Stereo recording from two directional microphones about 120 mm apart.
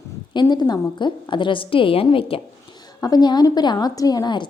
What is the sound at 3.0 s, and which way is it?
A woman's voice, 35° left (ahead or behind).